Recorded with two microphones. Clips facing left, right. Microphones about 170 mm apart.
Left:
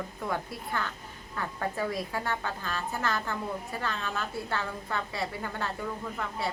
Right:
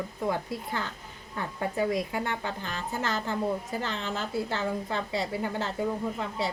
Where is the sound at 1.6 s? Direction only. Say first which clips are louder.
Right 4 dB; 20° right (ahead or behind).